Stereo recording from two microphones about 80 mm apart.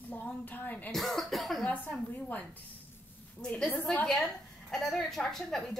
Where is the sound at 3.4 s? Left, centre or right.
Centre.